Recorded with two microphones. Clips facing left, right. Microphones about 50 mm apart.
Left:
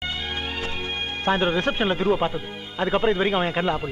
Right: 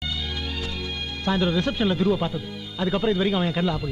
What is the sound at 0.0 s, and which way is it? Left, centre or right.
Speech, left.